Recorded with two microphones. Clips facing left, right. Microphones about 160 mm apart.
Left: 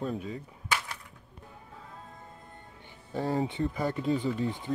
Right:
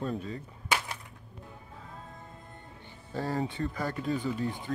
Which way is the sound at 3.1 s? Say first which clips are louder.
Left 2 dB; 20° left (ahead or behind).